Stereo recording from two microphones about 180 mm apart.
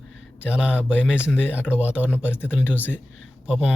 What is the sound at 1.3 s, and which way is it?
Speech, 10° left (ahead or behind).